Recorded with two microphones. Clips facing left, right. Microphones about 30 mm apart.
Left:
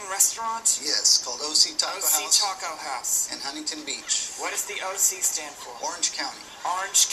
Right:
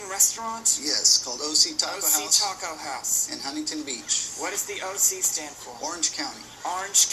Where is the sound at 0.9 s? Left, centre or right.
Left.